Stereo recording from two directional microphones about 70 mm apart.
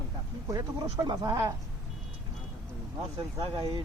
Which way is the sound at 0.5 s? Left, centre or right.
Right.